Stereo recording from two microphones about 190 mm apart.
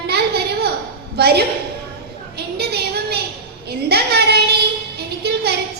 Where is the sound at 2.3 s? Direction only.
60° right (ahead or behind).